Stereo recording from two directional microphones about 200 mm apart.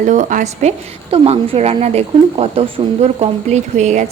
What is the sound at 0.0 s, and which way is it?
A woman's voice, 40° right (ahead or behind).